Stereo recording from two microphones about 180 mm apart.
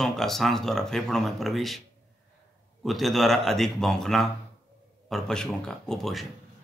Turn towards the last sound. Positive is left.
turn(degrees=0)  # may be behind; listen again after turning